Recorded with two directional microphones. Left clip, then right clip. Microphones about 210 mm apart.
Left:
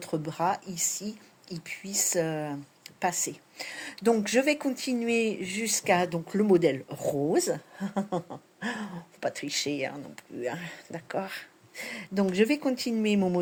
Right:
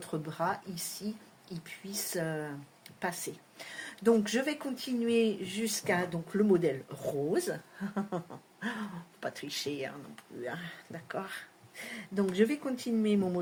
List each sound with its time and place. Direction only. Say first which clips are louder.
0.0 s speech: left 5 dB; 30° left (ahead or behind)